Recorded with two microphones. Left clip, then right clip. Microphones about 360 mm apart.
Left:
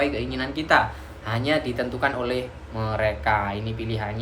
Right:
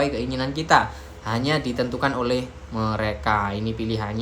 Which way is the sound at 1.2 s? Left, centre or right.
Centre.